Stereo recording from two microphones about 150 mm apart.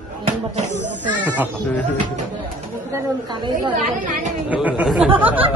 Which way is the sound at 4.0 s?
60° right (ahead or behind).